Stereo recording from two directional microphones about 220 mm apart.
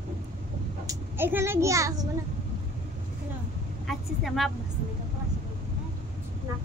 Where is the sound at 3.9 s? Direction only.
Centre (ahead or behind).